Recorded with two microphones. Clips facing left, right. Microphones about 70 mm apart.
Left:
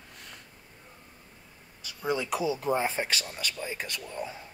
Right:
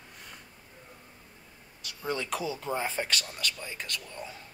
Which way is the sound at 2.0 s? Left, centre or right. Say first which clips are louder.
Left 3 dB; centre.